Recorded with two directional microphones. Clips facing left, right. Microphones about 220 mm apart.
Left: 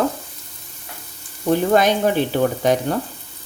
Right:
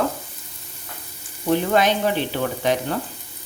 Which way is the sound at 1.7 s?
45° left (ahead or behind).